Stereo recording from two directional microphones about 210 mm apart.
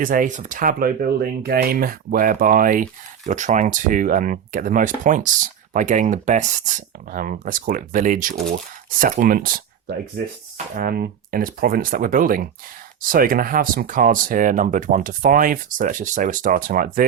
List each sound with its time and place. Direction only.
0.0 s speech: 40° right (ahead or behind)